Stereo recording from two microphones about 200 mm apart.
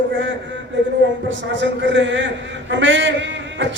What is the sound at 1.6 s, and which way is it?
A man's voice, 65° right (ahead or behind).